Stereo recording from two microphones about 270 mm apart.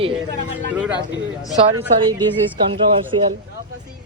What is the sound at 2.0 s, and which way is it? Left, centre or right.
A woman's voice, centre.